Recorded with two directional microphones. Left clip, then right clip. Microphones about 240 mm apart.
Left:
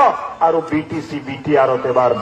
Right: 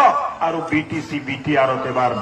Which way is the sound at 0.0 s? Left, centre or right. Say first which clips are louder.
Left 2 dB; left.